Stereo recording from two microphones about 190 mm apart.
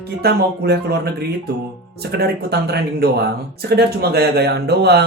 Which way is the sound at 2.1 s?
60° right (ahead or behind).